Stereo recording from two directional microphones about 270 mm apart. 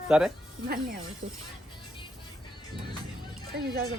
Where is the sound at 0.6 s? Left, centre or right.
Right.